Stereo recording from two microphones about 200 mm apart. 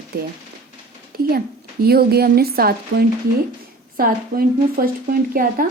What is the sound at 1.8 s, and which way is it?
Speech, 50° right (ahead or behind).